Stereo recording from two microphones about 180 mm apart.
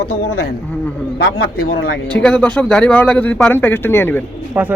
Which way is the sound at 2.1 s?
5° left (ahead or behind).